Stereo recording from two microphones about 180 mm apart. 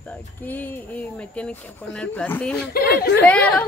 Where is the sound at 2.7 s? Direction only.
65° left (ahead or behind).